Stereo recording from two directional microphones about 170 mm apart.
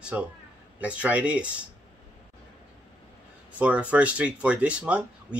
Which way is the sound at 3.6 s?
10° right (ahead or behind).